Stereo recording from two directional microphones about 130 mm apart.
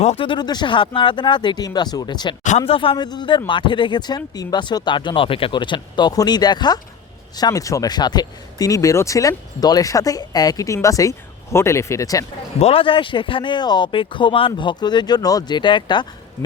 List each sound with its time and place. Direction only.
0.2 s speech: 35° left (ahead or behind)
2.6 s speech: 45° left (ahead or behind); by 12.2 s 25° left (ahead or behind)
12.5 s speech: 50° left (ahead or behind)